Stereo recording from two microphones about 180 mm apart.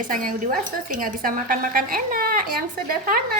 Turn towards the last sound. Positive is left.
turn(degrees=-55)  # may be behind; listen again after turning